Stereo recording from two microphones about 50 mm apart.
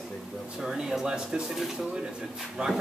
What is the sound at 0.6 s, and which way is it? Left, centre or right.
Speech, centre.